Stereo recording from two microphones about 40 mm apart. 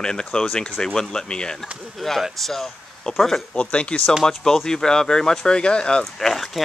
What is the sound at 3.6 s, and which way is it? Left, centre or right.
Speech, left.